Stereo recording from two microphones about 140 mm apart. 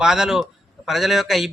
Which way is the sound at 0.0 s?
5° right (ahead or behind).